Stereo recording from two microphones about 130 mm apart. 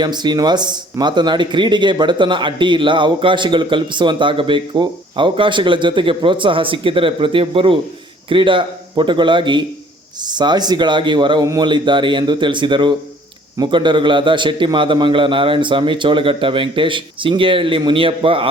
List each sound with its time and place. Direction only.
0.0 s speech: 35° right (ahead or behind)